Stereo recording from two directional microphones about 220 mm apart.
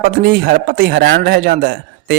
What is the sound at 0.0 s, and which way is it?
A man's voice, 45° right (ahead or behind).